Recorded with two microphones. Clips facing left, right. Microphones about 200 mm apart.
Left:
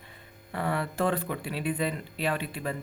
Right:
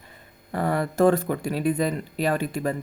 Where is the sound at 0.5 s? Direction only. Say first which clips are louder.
Right 6 dB; 40° right (ahead or behind).